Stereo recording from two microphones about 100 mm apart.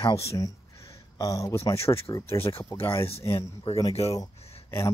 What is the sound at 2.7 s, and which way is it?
Speech, 70° left (ahead or behind).